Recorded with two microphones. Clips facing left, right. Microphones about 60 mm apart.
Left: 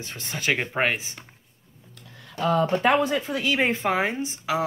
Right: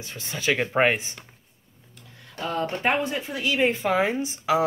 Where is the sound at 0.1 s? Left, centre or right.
Left.